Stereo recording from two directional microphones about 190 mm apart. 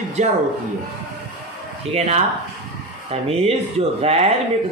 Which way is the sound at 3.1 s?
30° right (ahead or behind).